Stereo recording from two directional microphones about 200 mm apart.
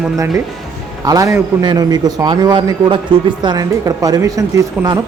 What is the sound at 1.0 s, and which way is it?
A man's voice, 15° right (ahead or behind).